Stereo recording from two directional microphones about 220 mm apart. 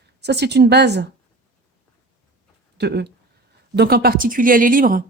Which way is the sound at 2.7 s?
50° right (ahead or behind).